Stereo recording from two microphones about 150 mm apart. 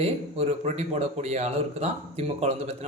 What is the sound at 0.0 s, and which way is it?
Speech, 45° right (ahead or behind).